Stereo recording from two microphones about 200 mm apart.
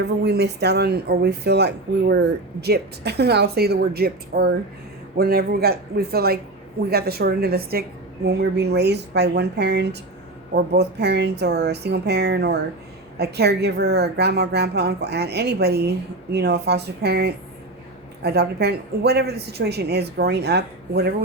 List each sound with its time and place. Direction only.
0.0 s a woman's voice: 55° right (ahead or behind)